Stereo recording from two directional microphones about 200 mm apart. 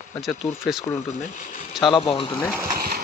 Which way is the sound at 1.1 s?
40° left (ahead or behind).